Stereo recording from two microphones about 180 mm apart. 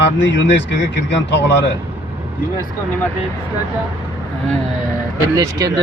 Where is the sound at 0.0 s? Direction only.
85° left.